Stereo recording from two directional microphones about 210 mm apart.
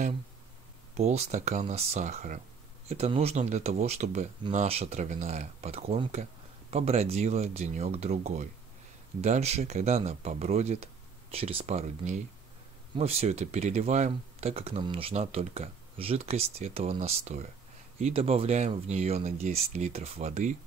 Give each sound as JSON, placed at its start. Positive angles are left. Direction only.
{"t": 0.9, "sound": "speech", "side_deg": -30}